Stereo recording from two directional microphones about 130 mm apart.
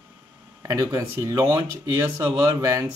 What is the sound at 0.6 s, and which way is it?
Speech, 25° right (ahead or behind).